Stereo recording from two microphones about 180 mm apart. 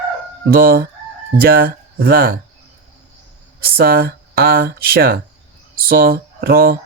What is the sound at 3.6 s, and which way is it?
Speech, 55° right (ahead or behind).